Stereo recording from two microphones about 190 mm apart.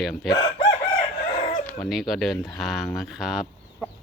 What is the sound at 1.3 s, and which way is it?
Chicken, 40° left (ahead or behind).